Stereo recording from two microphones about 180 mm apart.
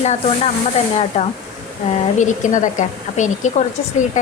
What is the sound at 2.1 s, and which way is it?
A woman's voice, 45° left (ahead or behind).